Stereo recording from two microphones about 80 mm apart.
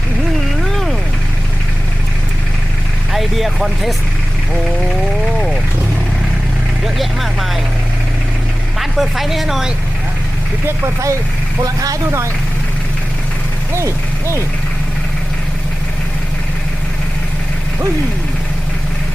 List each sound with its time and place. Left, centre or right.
0.6 s a sound: centre
3.1 s vehicle: centre
6.8 s speech: centre
8.8 s speech: centre
10.7 s speech: right
11.6 s speech: right
13.7 s speech: right